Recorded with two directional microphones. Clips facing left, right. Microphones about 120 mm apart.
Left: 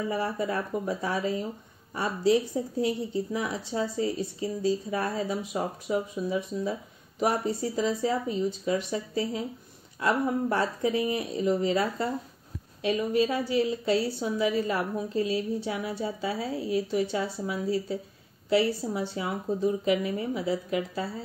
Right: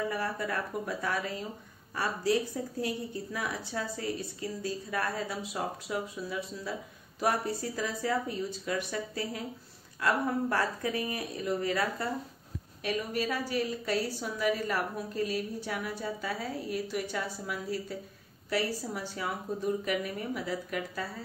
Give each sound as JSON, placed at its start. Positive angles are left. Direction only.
{"t": 0.1, "sound": "a woman's voice", "side_deg": 20}
{"t": 18.9, "sound": "a woman's voice", "side_deg": 25}